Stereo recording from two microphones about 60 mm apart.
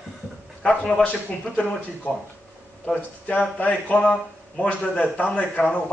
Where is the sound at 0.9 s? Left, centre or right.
Left.